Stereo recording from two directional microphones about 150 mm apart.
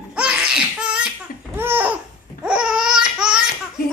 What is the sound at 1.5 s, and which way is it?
Laughter, 15° right (ahead or behind).